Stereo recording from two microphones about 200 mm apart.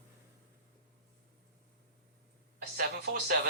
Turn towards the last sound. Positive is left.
turn(degrees=-50)  # may be behind; listen again after turning